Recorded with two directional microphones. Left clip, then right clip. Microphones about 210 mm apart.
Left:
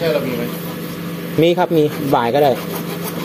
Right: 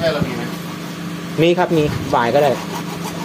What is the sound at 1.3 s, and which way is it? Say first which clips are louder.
Speech: left 1 dB; 35° left (ahead or behind).